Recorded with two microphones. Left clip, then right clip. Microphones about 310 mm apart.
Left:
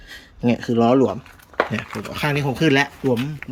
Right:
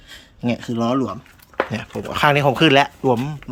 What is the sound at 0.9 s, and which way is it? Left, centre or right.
Speech, centre.